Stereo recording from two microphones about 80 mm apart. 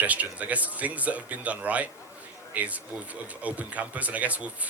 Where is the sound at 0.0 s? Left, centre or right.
Centre.